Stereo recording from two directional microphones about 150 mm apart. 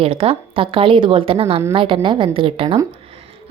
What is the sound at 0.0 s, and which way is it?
A woman's voice, 40° right (ahead or behind).